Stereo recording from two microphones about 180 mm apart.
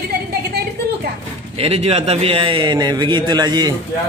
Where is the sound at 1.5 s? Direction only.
35° right (ahead or behind).